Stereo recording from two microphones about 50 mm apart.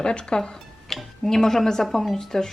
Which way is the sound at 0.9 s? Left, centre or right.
Centre.